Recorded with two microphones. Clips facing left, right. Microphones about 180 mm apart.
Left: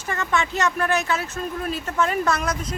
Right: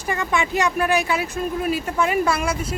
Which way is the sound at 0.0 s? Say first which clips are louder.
Right 2 dB; 15° right (ahead or behind).